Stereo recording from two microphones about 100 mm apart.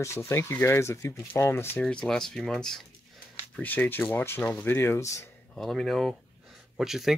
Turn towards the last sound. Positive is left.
turn(degrees=-5)  # may be behind; listen again after turning